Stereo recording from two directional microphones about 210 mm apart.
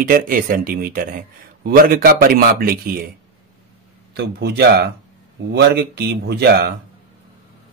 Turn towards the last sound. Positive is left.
turn(degrees=-50)  # may be behind; listen again after turning